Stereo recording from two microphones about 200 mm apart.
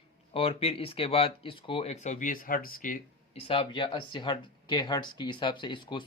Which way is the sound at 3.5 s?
25° left (ahead or behind).